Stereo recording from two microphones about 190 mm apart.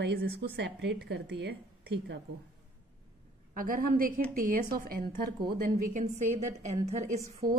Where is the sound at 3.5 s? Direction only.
50° right (ahead or behind).